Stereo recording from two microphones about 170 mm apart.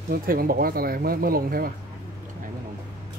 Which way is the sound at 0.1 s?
60° right (ahead or behind).